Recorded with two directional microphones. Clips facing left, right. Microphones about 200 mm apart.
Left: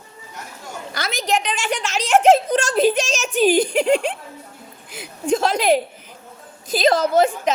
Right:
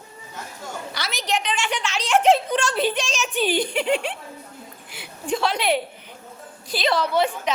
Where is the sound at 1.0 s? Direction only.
50° left (ahead or behind).